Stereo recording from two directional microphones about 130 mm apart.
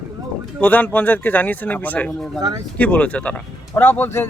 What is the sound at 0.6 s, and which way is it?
Speech, 10° left (ahead or behind).